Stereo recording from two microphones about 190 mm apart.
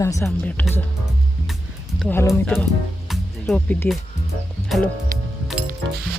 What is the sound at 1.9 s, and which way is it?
Speech, 10° left (ahead or behind).